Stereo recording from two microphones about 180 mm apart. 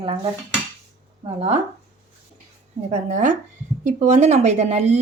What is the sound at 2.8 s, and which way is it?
Speech, 40° right (ahead or behind).